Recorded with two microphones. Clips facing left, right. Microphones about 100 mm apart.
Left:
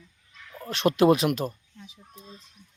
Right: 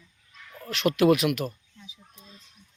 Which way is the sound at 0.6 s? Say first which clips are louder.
Left 1 dB; 30° left (ahead or behind).